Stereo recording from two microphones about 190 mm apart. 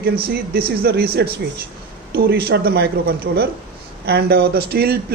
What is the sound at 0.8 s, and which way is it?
A man's voice, 55° right (ahead or behind).